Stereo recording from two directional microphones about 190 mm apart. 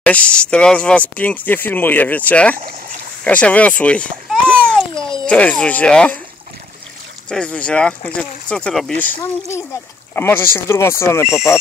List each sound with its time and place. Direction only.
0.0 s speech: 5° left (ahead or behind)
4.9 s babbling: 25° left (ahead or behind)
5.2 s speech: 5° left (ahead or behind)
7.2 s speech: 5° left (ahead or behind)